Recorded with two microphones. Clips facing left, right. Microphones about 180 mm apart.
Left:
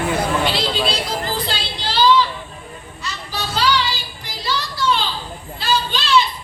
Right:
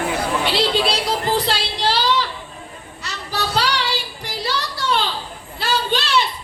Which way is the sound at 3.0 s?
70° right (ahead or behind).